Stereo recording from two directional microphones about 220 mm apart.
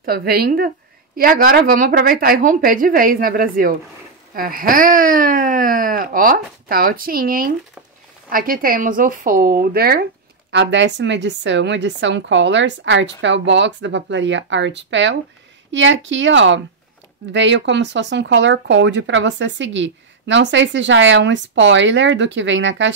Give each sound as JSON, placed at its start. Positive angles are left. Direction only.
{"t": 0.0, "sound": "a woman's voice", "side_deg": -45}
{"t": 10.5, "sound": "speech", "side_deg": -55}